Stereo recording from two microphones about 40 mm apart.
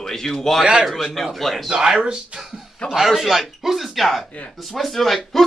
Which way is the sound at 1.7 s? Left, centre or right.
Centre.